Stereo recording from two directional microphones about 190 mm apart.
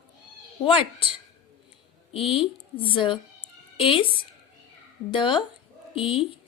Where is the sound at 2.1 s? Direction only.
30° left (ahead or behind).